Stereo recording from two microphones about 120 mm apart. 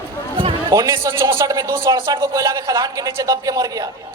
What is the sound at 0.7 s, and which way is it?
Speech, 25° right (ahead or behind).